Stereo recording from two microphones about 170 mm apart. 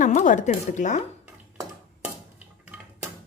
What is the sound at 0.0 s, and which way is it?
A woman's voice, 50° left (ahead or behind).